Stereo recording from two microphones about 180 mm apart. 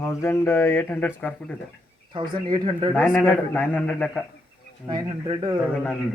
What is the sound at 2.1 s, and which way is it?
Speech, 25° right (ahead or behind).